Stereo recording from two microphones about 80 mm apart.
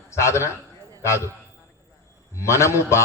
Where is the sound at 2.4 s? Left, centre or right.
Left.